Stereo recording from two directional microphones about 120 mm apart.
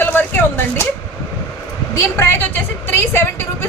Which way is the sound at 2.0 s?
20° left (ahead or behind).